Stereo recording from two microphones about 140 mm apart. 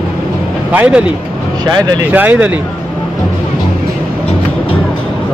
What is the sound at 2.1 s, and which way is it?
Speech, 10° right (ahead or behind).